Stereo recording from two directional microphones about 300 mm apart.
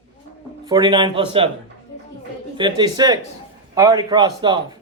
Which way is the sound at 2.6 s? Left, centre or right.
Centre.